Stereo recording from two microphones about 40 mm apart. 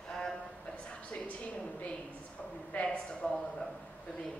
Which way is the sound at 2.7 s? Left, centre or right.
Left.